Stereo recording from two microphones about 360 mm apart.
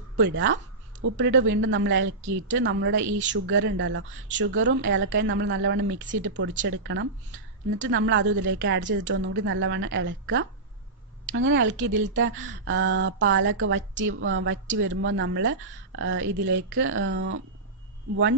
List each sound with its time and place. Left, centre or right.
0.1 s a woman's voice: right